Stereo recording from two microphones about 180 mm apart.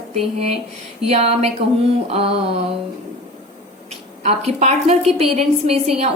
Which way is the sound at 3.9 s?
35° right (ahead or behind).